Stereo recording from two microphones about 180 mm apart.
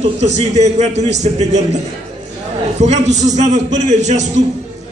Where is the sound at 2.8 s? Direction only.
40° right (ahead or behind).